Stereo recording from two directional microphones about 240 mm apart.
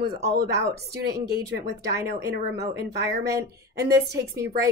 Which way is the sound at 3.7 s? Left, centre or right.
Right.